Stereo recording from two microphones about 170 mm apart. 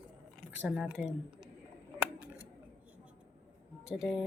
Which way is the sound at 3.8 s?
5° right (ahead or behind).